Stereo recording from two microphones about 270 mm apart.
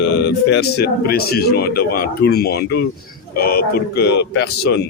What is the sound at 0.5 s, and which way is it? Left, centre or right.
Speech, left.